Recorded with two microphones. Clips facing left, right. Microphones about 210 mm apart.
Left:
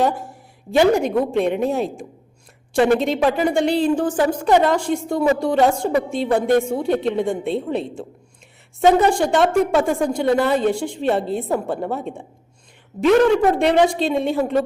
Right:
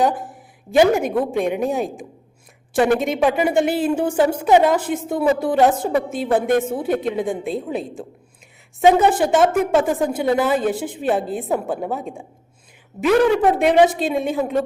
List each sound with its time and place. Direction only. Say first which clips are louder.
0.0 s a woman's voice: even; centre (ahead or behind)
8.8 s a woman's voice: even; 15° right (ahead or behind)
9.1 s a woman's voice: even; 5° right (ahead or behind)